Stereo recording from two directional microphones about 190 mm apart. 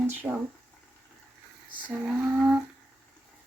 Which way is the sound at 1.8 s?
5° right (ahead or behind).